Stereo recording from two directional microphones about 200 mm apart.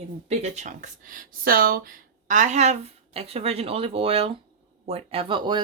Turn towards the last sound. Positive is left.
turn(degrees=-25)  # may be behind; listen again after turning